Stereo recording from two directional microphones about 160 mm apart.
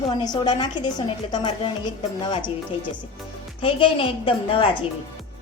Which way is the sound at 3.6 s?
35° left (ahead or behind).